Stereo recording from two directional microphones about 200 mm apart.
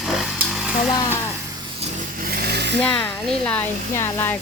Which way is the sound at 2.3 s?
50° right (ahead or behind).